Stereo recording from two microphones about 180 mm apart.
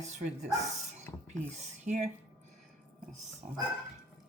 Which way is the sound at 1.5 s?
40° right (ahead or behind).